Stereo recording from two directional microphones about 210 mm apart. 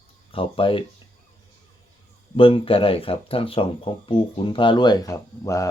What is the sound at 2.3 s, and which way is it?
Speech, 25° left (ahead or behind).